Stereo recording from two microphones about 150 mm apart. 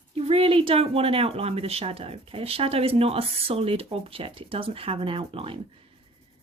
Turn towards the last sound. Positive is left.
turn(degrees=-40)  # may be behind; listen again after turning